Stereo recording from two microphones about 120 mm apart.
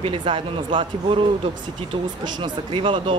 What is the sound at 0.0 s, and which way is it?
A woman's voice, 45° right (ahead or behind).